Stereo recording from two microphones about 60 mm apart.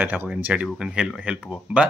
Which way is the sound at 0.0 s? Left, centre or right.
Right.